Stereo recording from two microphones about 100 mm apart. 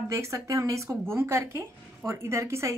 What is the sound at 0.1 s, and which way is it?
A woman's voice, 30° right (ahead or behind).